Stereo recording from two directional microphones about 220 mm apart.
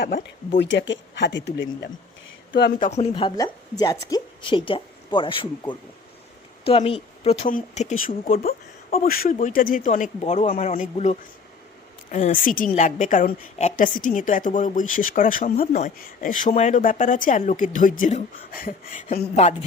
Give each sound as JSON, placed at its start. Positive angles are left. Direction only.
{"t": 0.0, "sound": "a woman's voice", "side_deg": 45}